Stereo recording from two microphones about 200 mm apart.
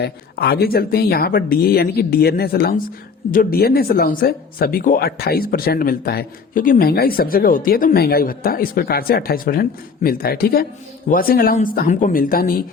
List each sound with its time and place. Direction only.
0.0 s speech: 50° left (ahead or behind)